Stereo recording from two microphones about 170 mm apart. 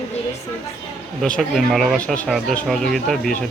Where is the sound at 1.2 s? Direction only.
5° left (ahead or behind).